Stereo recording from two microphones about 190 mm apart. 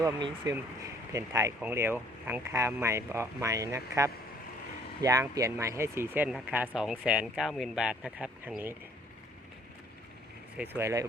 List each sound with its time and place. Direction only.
0.0 s speech: 20° right (ahead or behind)
10.6 s speech: 10° right (ahead or behind)